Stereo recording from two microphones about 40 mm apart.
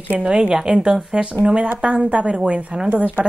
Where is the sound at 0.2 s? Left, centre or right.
Right.